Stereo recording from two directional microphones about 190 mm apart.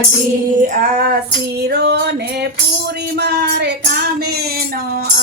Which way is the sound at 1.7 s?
60° right (ahead or behind).